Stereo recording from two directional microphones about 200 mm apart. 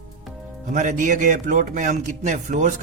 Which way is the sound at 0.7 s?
40° right (ahead or behind).